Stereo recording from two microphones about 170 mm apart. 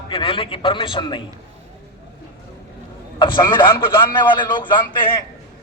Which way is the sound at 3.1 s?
25° left (ahead or behind).